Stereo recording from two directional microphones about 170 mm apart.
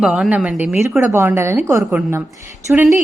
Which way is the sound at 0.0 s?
5° right (ahead or behind).